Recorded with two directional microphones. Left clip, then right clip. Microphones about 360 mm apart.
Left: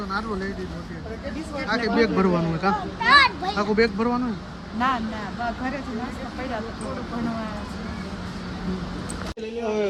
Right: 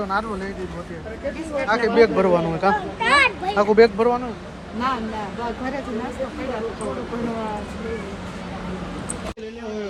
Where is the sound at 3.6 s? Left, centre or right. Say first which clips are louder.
Right 8 dB; right.